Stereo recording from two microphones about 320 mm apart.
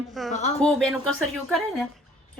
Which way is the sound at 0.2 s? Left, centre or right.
Centre.